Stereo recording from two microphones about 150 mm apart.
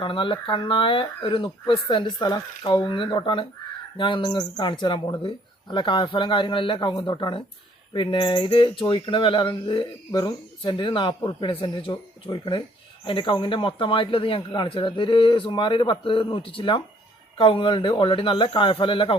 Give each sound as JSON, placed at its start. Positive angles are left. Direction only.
{"t": 0.0, "sound": "speech", "side_deg": 35}